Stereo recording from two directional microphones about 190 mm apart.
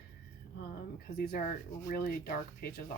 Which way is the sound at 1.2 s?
50° left (ahead or behind).